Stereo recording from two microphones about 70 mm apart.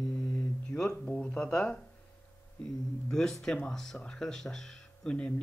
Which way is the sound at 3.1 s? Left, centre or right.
Centre.